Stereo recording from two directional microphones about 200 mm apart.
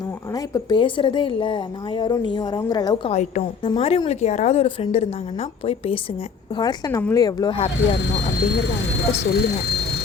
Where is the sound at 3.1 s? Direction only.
30° left (ahead or behind).